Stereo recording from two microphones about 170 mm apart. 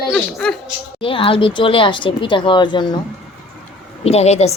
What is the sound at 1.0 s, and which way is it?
Speech, 30° left (ahead or behind).